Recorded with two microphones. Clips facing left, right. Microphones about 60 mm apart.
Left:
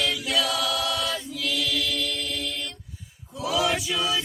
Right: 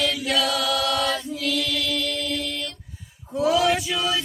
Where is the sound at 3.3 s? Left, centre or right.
Right.